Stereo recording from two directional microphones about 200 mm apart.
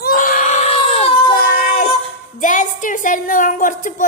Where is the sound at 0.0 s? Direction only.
45° left (ahead or behind).